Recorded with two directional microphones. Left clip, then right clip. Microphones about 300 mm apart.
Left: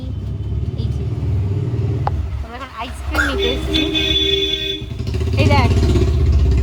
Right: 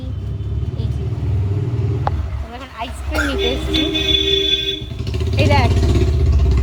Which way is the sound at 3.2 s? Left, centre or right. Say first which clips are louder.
Right 1 dB; centre.